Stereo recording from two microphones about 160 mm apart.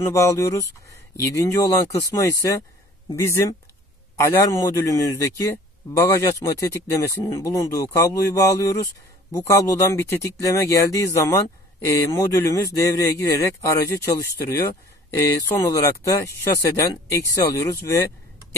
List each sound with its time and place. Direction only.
0.0 s a man's voice: 15° left (ahead or behind)